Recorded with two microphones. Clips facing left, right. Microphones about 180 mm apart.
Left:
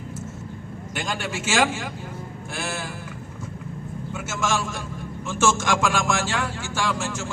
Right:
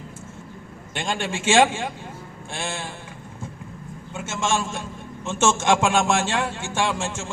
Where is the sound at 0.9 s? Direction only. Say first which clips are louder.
Right 2 dB; 25° right (ahead or behind).